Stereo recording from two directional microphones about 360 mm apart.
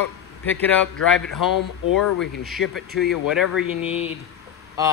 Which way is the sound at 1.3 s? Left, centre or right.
Left.